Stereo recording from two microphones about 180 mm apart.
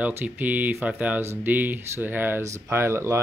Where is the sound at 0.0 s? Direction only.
10° right (ahead or behind).